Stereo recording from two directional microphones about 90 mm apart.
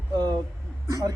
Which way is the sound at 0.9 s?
40° right (ahead or behind).